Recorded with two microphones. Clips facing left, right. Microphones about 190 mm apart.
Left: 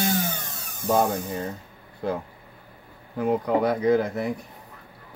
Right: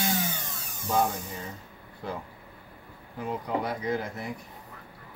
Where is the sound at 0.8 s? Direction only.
55° left (ahead or behind).